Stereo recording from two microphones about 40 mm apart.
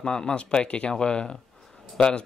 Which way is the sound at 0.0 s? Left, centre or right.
Centre.